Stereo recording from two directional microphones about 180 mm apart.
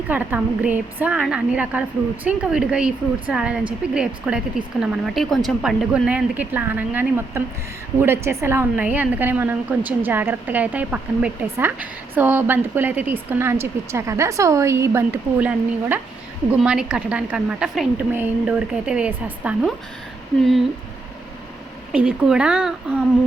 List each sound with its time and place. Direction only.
0.1 s a woman's voice: 10° right (ahead or behind)
21.9 s speech: 5° right (ahead or behind)